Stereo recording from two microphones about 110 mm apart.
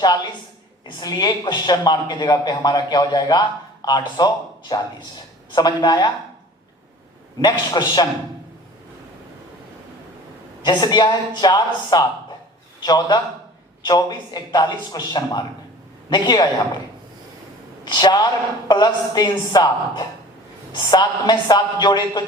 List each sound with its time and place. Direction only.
0.9 s speech: 40° left (ahead or behind)
7.4 s speech: 40° left (ahead or behind)
10.7 s a man's voice: 40° left (ahead or behind)
17.8 s a woman's voice: 40° left (ahead or behind)